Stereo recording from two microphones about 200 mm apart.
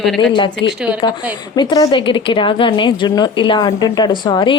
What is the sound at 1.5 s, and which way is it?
A woman's voice, 20° left (ahead or behind).